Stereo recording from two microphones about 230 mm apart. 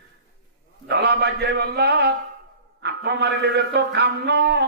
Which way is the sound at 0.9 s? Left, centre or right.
Right.